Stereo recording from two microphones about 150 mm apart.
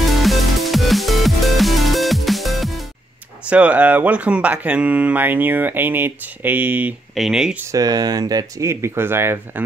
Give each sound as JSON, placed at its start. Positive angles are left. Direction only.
{"t": 0.0, "sound": "music", "side_deg": 0}
{"t": 3.4, "sound": "speech", "side_deg": -10}
{"t": 7.7, "sound": "speech", "side_deg": -25}